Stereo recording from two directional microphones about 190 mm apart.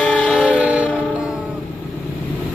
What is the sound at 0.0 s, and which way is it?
Music, 5° left (ahead or behind).